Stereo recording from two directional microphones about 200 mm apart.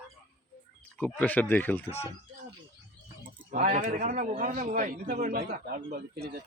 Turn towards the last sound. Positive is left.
turn(degrees=-50)  # may be behind; listen again after turning